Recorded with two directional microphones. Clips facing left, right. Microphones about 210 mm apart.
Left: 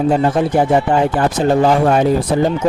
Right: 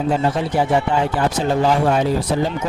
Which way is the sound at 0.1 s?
50° left (ahead or behind).